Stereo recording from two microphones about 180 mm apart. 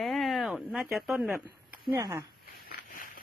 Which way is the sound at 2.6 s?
55° left (ahead or behind).